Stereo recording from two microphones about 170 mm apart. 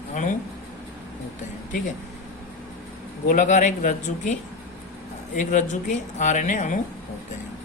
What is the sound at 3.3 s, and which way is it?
Speech, 45° left (ahead or behind).